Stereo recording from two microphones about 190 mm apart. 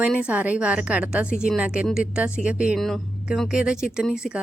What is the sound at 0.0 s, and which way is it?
A woman's voice, 5° right (ahead or behind).